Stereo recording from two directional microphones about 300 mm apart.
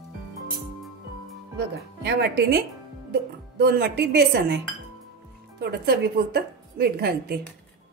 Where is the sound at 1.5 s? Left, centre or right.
Right.